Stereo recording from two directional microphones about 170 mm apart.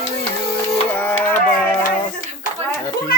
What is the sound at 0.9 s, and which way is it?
Speech, 10° left (ahead or behind).